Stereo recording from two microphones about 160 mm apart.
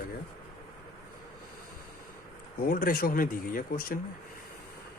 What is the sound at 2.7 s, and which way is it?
Speech, 60° left (ahead or behind).